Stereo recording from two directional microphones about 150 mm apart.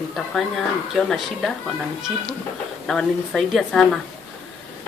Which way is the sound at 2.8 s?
Centre (ahead or behind).